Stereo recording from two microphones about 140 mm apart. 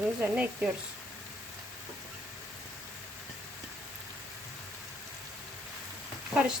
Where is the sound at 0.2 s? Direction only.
10° right (ahead or behind).